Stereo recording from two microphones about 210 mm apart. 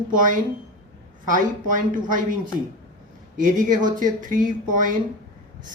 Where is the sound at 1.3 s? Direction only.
40° right (ahead or behind).